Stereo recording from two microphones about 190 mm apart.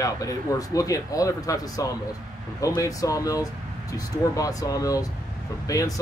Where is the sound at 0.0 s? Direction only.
20° left (ahead or behind).